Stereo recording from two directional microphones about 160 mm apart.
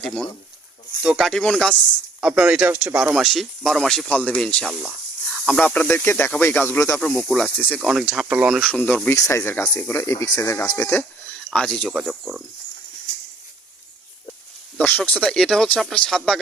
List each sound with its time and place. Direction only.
0.0 s speech: 5° left (ahead or behind)
2.2 s speech: 5° right (ahead or behind)
4.9 s speech: 10° left (ahead or behind)
7.0 s speech: 5° left (ahead or behind)
11.5 s speech: 5° left (ahead or behind)
14.8 s speech: 10° left (ahead or behind)